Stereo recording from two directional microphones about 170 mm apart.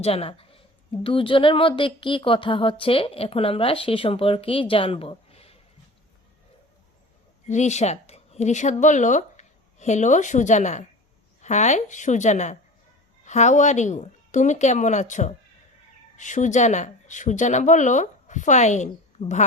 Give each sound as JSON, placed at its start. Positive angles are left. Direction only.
{"t": 0.0, "sound": "a woman's voice", "side_deg": 35}
{"t": 7.4, "sound": "speech", "side_deg": 45}